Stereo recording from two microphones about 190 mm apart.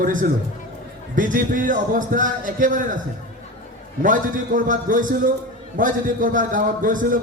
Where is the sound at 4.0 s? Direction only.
45° right (ahead or behind).